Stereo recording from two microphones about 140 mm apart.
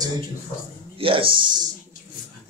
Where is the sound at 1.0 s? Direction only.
40° right (ahead or behind).